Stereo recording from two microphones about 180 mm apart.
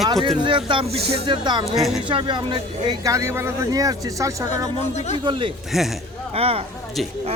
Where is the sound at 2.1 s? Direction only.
25° right (ahead or behind).